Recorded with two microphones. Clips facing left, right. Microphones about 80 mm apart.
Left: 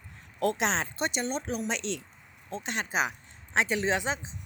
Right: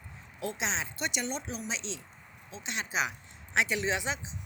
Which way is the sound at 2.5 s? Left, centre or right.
Left.